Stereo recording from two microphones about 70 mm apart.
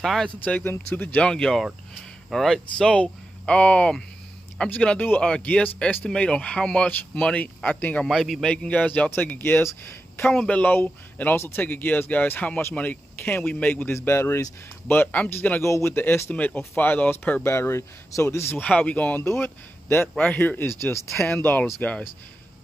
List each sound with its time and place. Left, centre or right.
0.0 s a man's voice: centre
0.5 s speech: left
1.2 s speech: centre
8.0 s a man's voice: centre
8.6 s speech: left
10.3 s speech: centre
10.6 s speech: left
13.2 s speech: left
13.5 s speech: left
13.9 s speech: left
14.9 s speech: left
15.6 s speech: left
18.5 s speech: left
19.2 s speech: left